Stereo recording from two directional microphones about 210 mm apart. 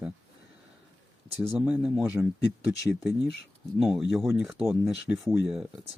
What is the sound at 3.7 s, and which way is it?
Speech, centre (ahead or behind).